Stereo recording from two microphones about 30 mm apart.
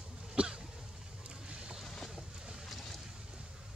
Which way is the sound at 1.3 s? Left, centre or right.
Right.